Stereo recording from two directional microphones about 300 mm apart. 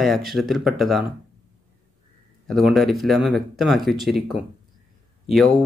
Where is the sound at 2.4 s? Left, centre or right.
Centre.